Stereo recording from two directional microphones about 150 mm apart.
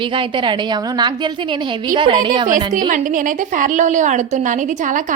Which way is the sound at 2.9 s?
60° right (ahead or behind).